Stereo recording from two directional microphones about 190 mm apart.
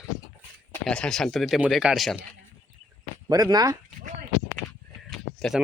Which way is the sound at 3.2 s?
20° right (ahead or behind).